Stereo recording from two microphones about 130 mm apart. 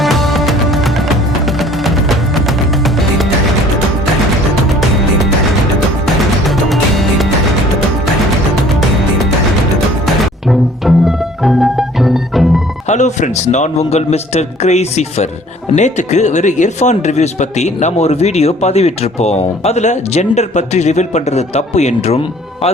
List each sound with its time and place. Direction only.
0.0 s music: centre (ahead or behind)
6.7 s music: centre (ahead or behind)
10.5 s music: centre (ahead or behind)
12.9 s speech: 65° left (ahead or behind)